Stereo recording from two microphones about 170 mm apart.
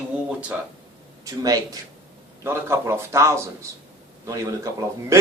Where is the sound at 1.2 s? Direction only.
20° right (ahead or behind).